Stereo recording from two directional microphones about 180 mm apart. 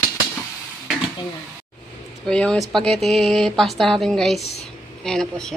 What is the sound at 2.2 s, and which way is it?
A woman's voice, 5° left (ahead or behind).